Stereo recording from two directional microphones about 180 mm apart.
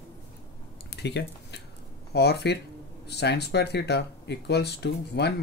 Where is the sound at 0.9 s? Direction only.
70° left (ahead or behind).